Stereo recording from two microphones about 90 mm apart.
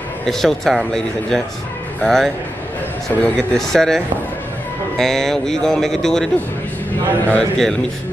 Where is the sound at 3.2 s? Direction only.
15° left (ahead or behind).